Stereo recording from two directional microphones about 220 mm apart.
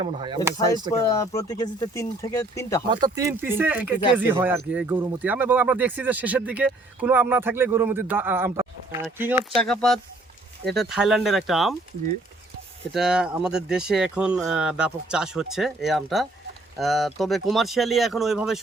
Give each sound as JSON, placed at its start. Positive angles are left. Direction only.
{"t": 0.0, "sound": "speech", "side_deg": -25}
{"t": 0.6, "sound": "speech", "side_deg": 15}
{"t": 2.9, "sound": "speech", "side_deg": -15}
{"t": 9.6, "sound": "speech", "side_deg": 5}
{"t": 12.9, "sound": "speech", "side_deg": -5}